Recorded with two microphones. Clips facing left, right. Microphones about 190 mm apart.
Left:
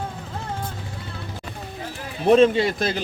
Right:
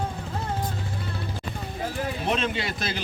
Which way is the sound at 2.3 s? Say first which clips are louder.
Left 15 dB; 45° left (ahead or behind).